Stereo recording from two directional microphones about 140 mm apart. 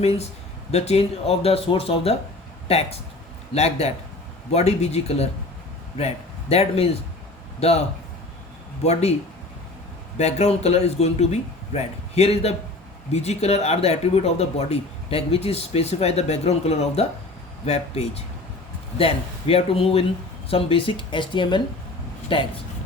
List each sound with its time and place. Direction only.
0.0 s a man's voice: 45° left (ahead or behind)
10.2 s speech: 50° left (ahead or behind)